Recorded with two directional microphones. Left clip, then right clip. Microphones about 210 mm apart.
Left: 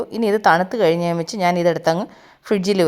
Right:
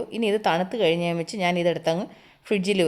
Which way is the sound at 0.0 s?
20° left (ahead or behind).